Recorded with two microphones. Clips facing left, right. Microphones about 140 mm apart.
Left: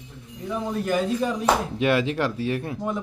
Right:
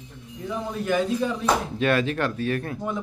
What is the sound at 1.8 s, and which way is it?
Speech, 20° left (ahead or behind).